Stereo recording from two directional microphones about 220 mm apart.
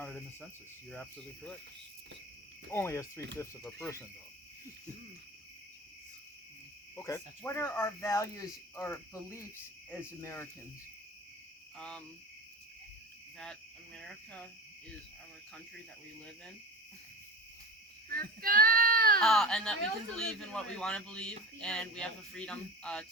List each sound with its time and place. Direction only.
0.0 s speech: 5° left (ahead or behind)
2.7 s cricket: 10° left (ahead or behind)
6.9 s cricket: 10° left (ahead or behind)
11.8 s speech: 5° left (ahead or behind)
13.4 s speech: 5° left (ahead or behind)
18.1 s speech: 40° right (ahead or behind)
19.2 s speech: centre (ahead or behind)